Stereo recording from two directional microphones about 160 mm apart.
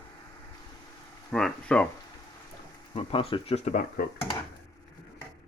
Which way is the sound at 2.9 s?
35° left (ahead or behind).